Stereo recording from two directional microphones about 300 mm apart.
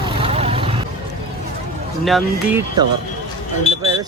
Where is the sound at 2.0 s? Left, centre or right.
Centre.